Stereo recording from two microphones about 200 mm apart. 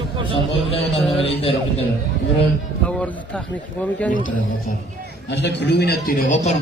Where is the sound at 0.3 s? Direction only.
30° left (ahead or behind).